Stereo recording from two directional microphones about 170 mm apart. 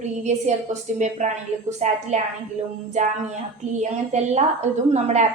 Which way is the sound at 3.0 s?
45° right (ahead or behind).